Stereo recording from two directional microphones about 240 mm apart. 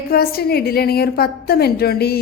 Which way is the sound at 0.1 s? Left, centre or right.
Left.